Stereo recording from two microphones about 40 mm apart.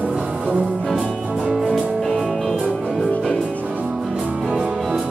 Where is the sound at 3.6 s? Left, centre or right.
Right.